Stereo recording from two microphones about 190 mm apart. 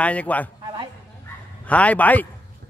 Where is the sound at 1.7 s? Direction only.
5° left (ahead or behind).